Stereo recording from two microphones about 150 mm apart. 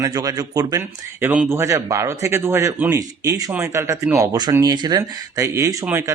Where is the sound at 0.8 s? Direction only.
10° right (ahead or behind).